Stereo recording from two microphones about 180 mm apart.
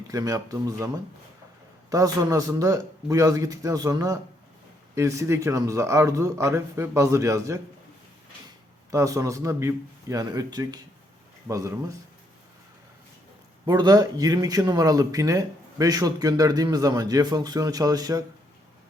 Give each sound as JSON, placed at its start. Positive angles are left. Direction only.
{"t": 0.1, "sound": "speech", "side_deg": -20}
{"t": 1.9, "sound": "a man's voice", "side_deg": -20}
{"t": 8.9, "sound": "a man's voice", "side_deg": -15}
{"t": 13.7, "sound": "speech", "side_deg": -20}